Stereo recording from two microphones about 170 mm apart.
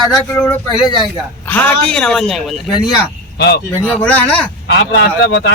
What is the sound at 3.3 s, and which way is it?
Speech, 75° left (ahead or behind).